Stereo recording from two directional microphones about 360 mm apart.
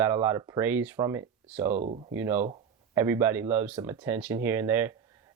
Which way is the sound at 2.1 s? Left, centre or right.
Centre.